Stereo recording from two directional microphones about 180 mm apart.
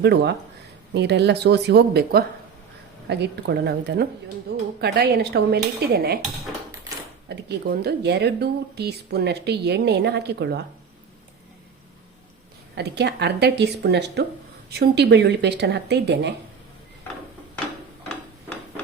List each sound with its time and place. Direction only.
0.0 s speech: 65° right (ahead or behind)
7.3 s speech: 65° right (ahead or behind)
12.7 s speech: 65° right (ahead or behind)